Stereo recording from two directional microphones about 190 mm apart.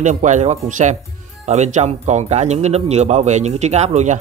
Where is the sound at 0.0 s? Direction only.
40° right (ahead or behind).